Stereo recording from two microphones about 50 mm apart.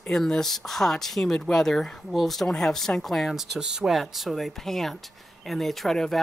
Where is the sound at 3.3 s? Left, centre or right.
Centre.